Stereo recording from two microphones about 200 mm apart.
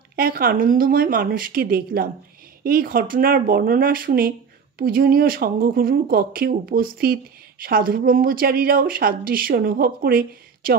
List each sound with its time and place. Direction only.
0.1 s speech: 45° right (ahead or behind)